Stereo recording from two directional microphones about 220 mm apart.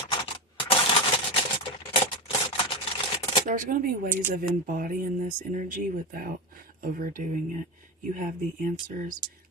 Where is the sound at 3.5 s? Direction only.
40° right (ahead or behind).